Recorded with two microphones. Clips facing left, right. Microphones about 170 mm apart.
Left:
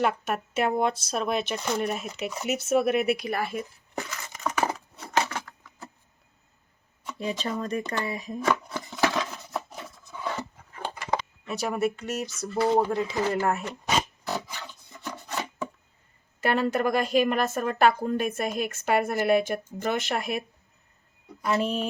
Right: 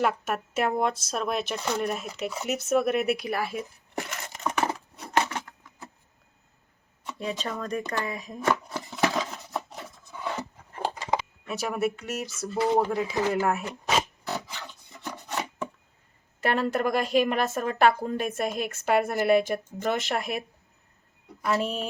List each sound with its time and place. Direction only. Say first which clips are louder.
0.0 s a woman's voice: even; centre (ahead or behind)
3.9 s a sound: right 1 dB; 70° right (ahead or behind)
4.9 s a sound: right 1 dB; 20° right (ahead or behind)
7.2 s a woman's voice: left 2 dB; centre (ahead or behind)
8.4 s a sound: even; centre (ahead or behind)
11.2 s a woman's voice: left 1 dB; 5° right (ahead or behind)
13.1 s speech: right 2 dB; 15° right (ahead or behind)
13.4 s zipper: even; 5° right (ahead or behind)
15.1 s rub: right 1 dB; centre (ahead or behind)
16.4 s a woman's voice: left 1 dB; centre (ahead or behind)
21.6 s a woman's voice: left 2 dB; centre (ahead or behind)